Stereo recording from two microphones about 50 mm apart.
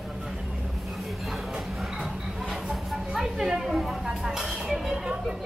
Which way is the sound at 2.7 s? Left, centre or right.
Centre.